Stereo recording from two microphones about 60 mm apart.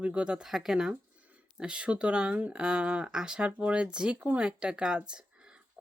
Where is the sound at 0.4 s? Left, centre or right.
Centre.